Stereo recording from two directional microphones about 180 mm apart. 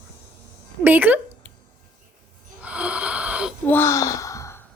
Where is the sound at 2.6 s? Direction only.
5° right (ahead or behind).